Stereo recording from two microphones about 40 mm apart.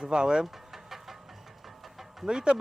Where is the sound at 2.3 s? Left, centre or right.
Right.